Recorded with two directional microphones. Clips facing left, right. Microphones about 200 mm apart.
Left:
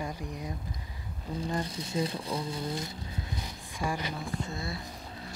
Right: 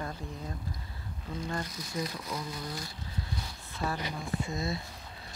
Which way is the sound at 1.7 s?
30° left (ahead or behind).